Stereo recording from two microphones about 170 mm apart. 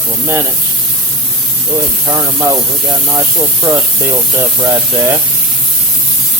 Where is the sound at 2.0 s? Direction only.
20° right (ahead or behind).